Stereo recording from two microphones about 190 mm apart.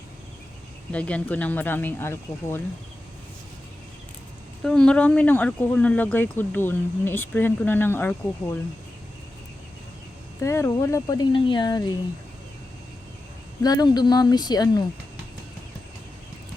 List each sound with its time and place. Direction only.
0.9 s speech: 5° left (ahead or behind)
4.6 s speech: 5° left (ahead or behind)
10.4 s speech: 15° left (ahead or behind)
13.6 s speech: 20° left (ahead or behind)